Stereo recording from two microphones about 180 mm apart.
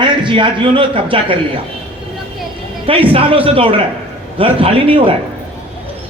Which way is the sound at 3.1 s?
30° right (ahead or behind).